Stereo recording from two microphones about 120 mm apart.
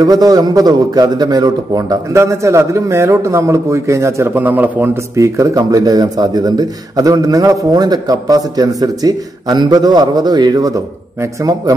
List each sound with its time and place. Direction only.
0.0 s a man's voice: 30° right (ahead or behind); by 4.9 s 15° right (ahead or behind)
5.1 s a man's voice: 25° right (ahead or behind)